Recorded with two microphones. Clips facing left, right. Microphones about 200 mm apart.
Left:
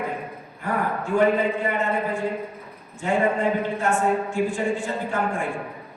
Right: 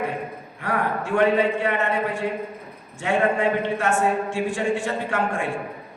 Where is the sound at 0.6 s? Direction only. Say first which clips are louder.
Right 1 dB; 85° right.